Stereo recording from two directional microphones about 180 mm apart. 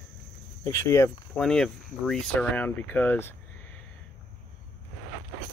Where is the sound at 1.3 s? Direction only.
5° left (ahead or behind).